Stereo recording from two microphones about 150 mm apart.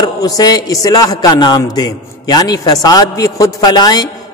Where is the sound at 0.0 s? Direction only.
25° left (ahead or behind).